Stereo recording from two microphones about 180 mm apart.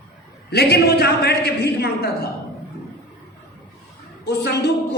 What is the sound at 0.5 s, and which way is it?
A man's voice, 65° left (ahead or behind).